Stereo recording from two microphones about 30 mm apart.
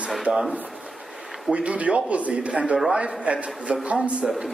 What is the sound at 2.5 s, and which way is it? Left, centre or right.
Speech, right.